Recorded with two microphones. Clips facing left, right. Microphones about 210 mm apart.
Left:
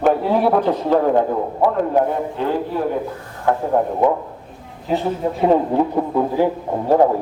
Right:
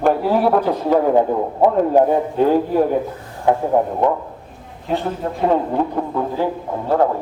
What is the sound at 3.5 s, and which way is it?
Speech, 15° right (ahead or behind).